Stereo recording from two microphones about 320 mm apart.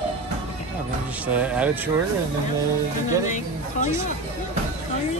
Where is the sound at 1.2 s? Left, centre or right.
Centre.